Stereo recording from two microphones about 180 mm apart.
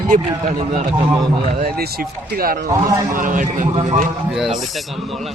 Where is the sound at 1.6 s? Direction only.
55° right (ahead or behind).